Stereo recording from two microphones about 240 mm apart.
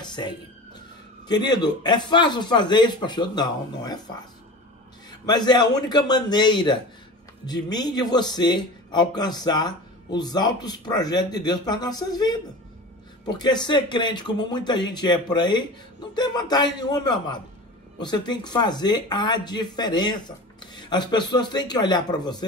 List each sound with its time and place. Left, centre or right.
0.0 s speech: centre
5.2 s speech: centre